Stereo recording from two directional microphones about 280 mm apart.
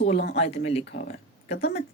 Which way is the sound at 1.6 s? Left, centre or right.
Left.